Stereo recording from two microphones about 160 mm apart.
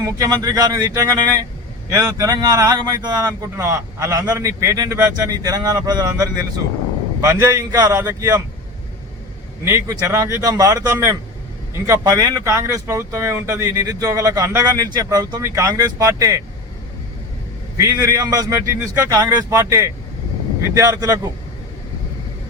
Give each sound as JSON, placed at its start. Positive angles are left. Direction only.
{"t": 0.0, "sound": "speech", "side_deg": -20}
{"t": 9.6, "sound": "speech", "side_deg": -20}
{"t": 17.7, "sound": "speech", "side_deg": -20}